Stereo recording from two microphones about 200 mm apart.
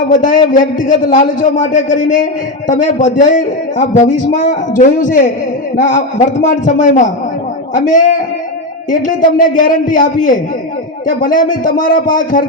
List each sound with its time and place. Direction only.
0.1 s a man's voice: 40° left (ahead or behind)